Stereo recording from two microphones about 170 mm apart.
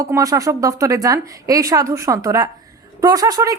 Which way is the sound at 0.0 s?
20° right (ahead or behind).